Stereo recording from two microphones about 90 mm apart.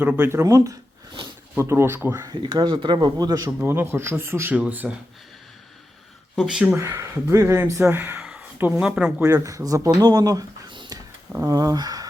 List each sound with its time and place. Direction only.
0.0 s speech: 20° right (ahead or behind)
0.4 s speech: 40° right (ahead or behind)
1.5 s speech: 30° right (ahead or behind)
2.2 s speech: 45° right (ahead or behind)
2.8 s speech: 55° right (ahead or behind)
3.6 s speech: 25° right (ahead or behind)
6.3 s speech: 5° right (ahead or behind)
6.7 s speech: 30° right (ahead or behind)
8.8 s speech: 10° right (ahead or behind)
9.2 s speech: 35° right (ahead or behind)
10.7 s a sound: 60° right (ahead or behind)
11.4 s speech: 45° right (ahead or behind)